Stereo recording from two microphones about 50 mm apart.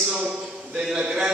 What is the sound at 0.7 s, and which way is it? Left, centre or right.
Speech, centre.